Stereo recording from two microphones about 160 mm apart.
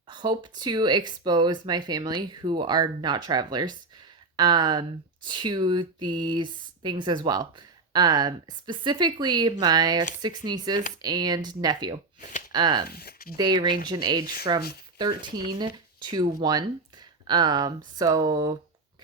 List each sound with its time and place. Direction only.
0.1 s speech: 30° right (ahead or behind)
12.9 s speech: 75° left (ahead or behind)
13.3 s speech: 25° right (ahead or behind)